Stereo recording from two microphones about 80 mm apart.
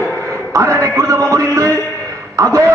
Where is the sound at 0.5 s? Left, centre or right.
Right.